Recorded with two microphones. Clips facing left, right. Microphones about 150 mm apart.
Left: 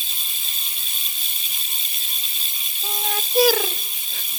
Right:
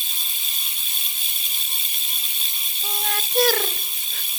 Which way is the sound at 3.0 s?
10° left (ahead or behind).